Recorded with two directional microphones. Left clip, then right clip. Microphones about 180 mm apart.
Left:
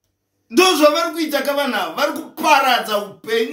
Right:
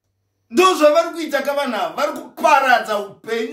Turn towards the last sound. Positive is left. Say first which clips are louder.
# left 3 dB
turn(degrees=-15)  # may be behind; listen again after turning